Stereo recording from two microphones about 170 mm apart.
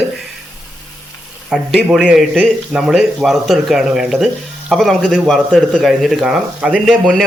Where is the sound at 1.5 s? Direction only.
5° right (ahead or behind).